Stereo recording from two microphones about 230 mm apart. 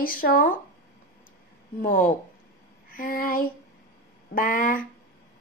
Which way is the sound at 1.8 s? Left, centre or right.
Left.